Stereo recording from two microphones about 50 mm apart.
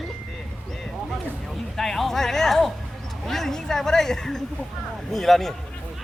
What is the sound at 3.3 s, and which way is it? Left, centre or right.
A woman's voice, centre.